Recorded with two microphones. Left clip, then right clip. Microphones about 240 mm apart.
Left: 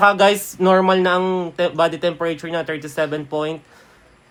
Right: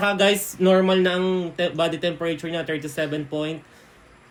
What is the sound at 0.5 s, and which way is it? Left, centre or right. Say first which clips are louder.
Speech: left 4 dB; left.